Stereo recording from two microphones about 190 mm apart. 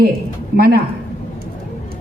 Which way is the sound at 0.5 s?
55° right (ahead or behind).